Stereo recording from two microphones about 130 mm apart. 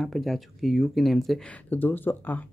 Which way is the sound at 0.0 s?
Centre (ahead or behind).